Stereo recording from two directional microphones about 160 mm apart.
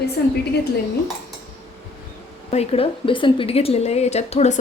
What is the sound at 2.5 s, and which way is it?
Speech, 40° left (ahead or behind).